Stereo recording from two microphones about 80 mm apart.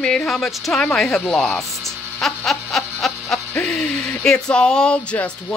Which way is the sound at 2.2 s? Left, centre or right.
Centre.